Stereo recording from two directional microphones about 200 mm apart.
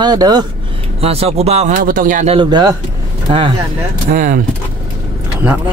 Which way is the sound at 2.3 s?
20° right (ahead or behind).